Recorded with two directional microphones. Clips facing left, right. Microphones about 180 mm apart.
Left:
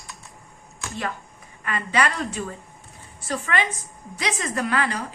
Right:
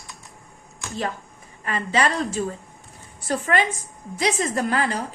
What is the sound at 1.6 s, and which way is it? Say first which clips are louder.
Speech: right 1 dB; 30° right (ahead or behind).